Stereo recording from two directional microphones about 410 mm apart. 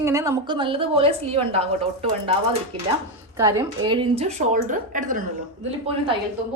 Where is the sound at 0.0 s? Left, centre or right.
Centre.